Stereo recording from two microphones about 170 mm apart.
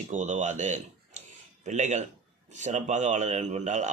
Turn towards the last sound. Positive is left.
turn(degrees=-45)  # may be behind; listen again after turning